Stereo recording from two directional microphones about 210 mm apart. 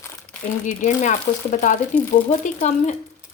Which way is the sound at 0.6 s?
35° left (ahead or behind).